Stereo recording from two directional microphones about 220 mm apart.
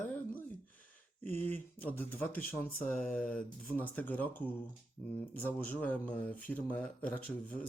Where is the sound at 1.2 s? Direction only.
10° left (ahead or behind).